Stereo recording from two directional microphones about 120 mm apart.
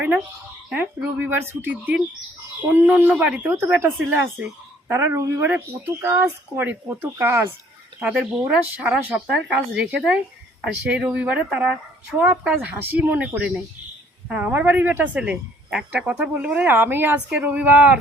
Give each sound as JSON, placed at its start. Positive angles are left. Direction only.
{"t": 0.7, "sound": "a woman's voice", "side_deg": -10}